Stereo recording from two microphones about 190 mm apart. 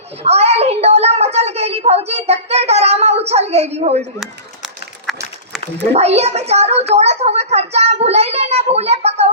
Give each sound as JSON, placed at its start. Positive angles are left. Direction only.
{"t": 0.2, "sound": "a child's voice", "side_deg": -35}
{"t": 4.2, "sound": "a sound", "side_deg": -5}
{"t": 5.9, "sound": "speech", "side_deg": -35}